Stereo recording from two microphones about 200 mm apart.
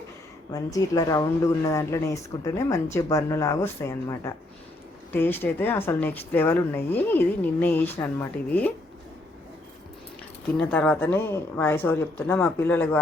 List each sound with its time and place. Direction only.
0.5 s a woman's voice: 15° left (ahead or behind)
10.6 s a woman's voice: 10° left (ahead or behind)